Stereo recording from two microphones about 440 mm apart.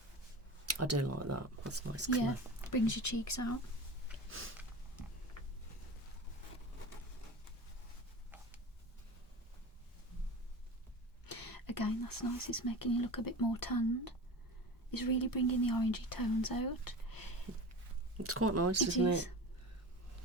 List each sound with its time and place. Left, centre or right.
0.6 s speech: right
2.6 s speech: left
4.3 s a sound: right
11.3 s speech: left
18.2 s speech: right